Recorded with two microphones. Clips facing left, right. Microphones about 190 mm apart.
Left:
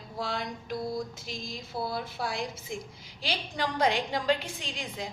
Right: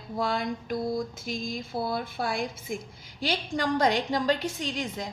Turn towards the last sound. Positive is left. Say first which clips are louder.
# right 5 dB
turn(degrees=-45)  # may be behind; listen again after turning